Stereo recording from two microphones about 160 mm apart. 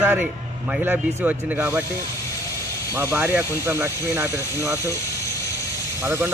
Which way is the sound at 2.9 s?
15° right (ahead or behind).